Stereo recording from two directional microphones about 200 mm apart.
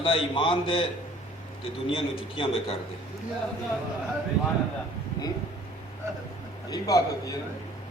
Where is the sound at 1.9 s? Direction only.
25° left (ahead or behind).